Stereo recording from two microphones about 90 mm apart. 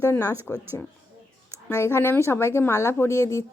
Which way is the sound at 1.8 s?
30° left (ahead or behind).